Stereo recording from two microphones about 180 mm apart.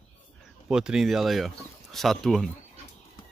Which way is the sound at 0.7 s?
5° right (ahead or behind).